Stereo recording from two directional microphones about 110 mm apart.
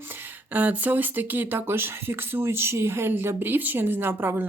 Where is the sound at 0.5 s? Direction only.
15° right (ahead or behind).